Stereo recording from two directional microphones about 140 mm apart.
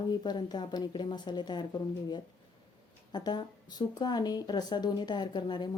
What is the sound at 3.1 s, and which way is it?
Speech, 30° left (ahead or behind).